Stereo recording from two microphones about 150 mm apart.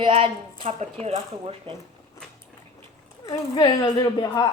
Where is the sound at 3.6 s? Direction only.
25° left (ahead or behind).